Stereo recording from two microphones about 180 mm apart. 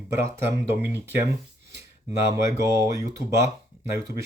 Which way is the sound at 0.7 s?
10° right (ahead or behind).